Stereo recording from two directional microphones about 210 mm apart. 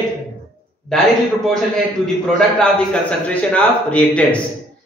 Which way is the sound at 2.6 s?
5° left (ahead or behind).